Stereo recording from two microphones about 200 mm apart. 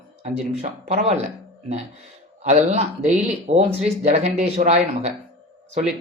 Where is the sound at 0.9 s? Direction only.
30° right (ahead or behind).